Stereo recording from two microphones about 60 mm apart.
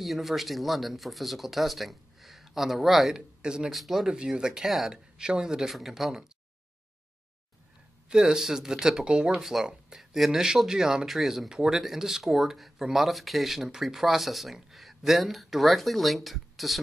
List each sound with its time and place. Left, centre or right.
0.0 s speech: centre
3.7 s speech: centre
4.1 s speech: centre
8.1 s speech: centre